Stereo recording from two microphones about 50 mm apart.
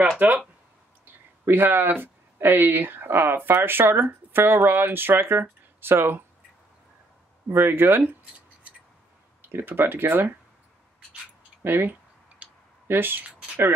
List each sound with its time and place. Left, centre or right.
0.2 s speech: right
1.5 s speech: right
7.5 s speech: right
9.5 s speech: right
11.6 s speech: right
12.4 s clicking: right
12.8 s speech: right